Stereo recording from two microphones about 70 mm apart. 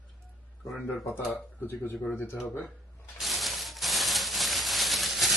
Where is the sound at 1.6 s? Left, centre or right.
Left.